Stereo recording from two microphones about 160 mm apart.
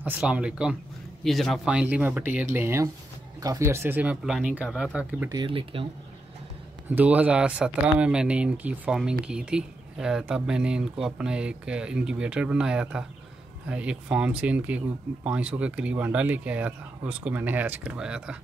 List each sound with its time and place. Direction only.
0.0 s speech: 10° right (ahead or behind)
5.3 s speech: 30° right (ahead or behind)
6.9 s speech: 10° right (ahead or behind)